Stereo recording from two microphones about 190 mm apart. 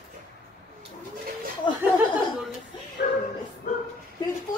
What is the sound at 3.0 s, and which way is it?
Bow-wow, 50° left (ahead or behind).